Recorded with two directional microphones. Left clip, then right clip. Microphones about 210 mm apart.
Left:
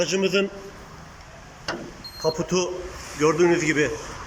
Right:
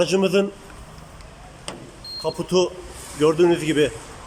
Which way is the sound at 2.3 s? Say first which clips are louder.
Right 2 dB; 10° right (ahead or behind).